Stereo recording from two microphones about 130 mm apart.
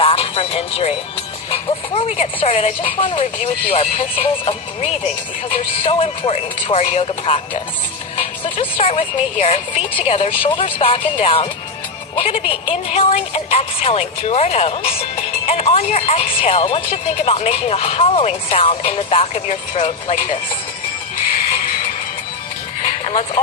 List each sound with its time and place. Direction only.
0.0 s music: 45° left (ahead or behind)
1.5 s speech: 50° left (ahead or behind)
8.1 s music: 50° left (ahead or behind)
9.4 s speech: 55° left (ahead or behind)
12.5 s speech: 50° left (ahead or behind)
22.9 s a sound: 50° left (ahead or behind)